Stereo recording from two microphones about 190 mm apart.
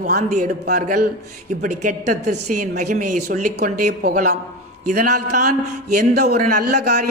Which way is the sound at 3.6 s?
50° right (ahead or behind).